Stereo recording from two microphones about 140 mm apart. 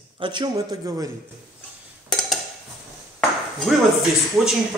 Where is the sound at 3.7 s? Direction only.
Centre (ahead or behind).